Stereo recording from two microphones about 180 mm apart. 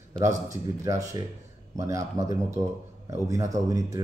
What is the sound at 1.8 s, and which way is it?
A man's voice, 20° right (ahead or behind).